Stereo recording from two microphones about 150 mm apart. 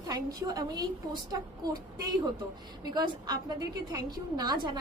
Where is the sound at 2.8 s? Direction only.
25° right (ahead or behind).